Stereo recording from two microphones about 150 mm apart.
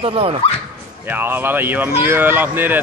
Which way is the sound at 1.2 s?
15° right (ahead or behind).